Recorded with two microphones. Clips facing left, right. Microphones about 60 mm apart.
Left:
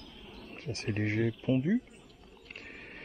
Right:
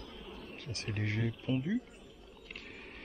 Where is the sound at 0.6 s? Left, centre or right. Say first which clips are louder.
Left 7 dB; left.